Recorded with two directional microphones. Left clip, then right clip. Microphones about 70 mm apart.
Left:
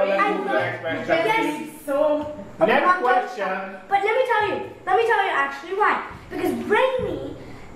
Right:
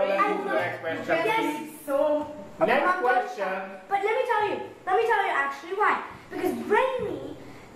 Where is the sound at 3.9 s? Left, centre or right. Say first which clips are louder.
Left 5 dB; centre.